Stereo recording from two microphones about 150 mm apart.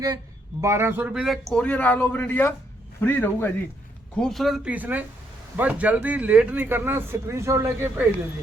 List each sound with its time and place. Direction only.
0.6 s speech: 15° right (ahead or behind)
1.1 s speech: centre (ahead or behind)
4.2 s speech: centre (ahead or behind); by 8.0 s 15° right (ahead or behind)